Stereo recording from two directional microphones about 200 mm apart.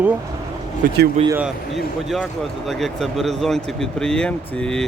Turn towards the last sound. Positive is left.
turn(degrees=5)  # may be behind; listen again after turning